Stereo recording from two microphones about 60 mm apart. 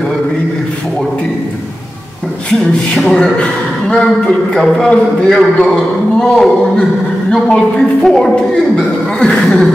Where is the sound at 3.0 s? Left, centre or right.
Centre.